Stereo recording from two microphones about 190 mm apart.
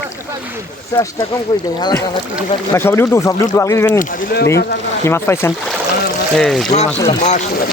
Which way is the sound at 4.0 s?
55° left (ahead or behind).